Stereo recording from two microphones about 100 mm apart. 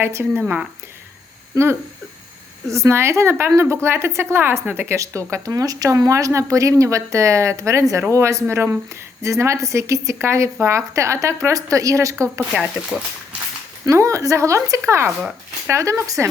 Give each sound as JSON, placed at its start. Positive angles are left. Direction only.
{"t": 0.0, "sound": "speech", "side_deg": -25}
{"t": 1.5, "sound": "a woman's voice", "side_deg": -35}
{"t": 12.4, "sound": "speech", "side_deg": -10}
{"t": 13.8, "sound": "a woman's voice", "side_deg": -30}